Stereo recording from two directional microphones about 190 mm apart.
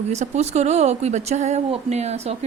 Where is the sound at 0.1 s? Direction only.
35° right (ahead or behind).